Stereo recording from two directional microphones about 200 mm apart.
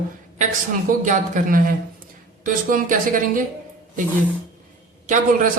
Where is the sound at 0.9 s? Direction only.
40° right (ahead or behind).